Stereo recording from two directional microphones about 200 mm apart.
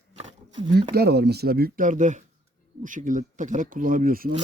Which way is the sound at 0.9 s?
55° right (ahead or behind).